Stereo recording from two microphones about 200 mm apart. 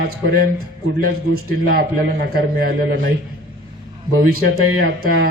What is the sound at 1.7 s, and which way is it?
Speech, 50° right (ahead or behind).